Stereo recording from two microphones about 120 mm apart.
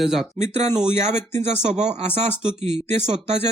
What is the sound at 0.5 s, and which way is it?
Speech, 65° right (ahead or behind).